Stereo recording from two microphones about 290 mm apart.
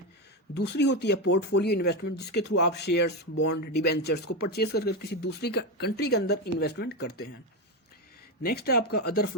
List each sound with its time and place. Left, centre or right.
0.5 s speech: left
8.4 s speech: left